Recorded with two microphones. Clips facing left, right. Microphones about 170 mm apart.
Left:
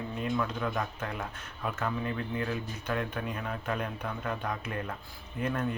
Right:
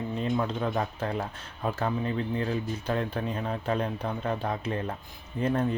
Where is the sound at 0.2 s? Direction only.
30° right (ahead or behind).